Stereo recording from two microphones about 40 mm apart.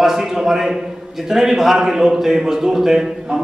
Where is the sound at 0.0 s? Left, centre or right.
Centre.